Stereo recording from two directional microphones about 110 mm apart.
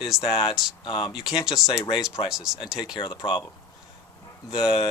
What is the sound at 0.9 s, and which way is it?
Speech, 45° left (ahead or behind).